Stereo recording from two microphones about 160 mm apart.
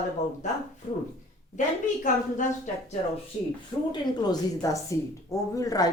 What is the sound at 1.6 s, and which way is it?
Speech, 50° left (ahead or behind).